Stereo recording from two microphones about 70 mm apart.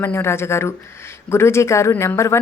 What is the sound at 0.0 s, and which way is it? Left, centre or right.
A woman's voice, left.